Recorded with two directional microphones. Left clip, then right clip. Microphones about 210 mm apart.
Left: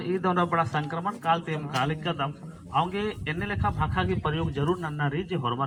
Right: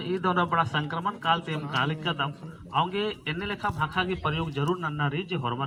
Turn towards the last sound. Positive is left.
turn(degrees=-20)  # may be behind; listen again after turning